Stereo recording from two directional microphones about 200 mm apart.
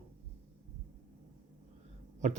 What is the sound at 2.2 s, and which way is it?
Speech, 35° right (ahead or behind).